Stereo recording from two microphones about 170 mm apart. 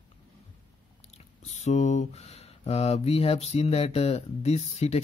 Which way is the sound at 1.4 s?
40° left (ahead or behind).